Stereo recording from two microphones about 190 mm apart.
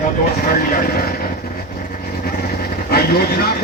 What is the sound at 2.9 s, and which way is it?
Speech, 55° left (ahead or behind).